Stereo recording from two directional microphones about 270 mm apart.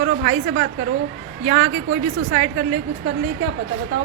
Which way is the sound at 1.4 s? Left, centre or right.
Right.